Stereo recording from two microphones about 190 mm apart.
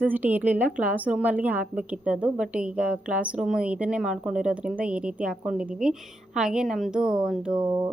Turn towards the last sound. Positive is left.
turn(degrees=-20)  # may be behind; listen again after turning